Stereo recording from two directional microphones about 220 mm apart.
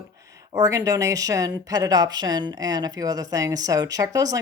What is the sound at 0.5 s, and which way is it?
Speech, 15° right (ahead or behind).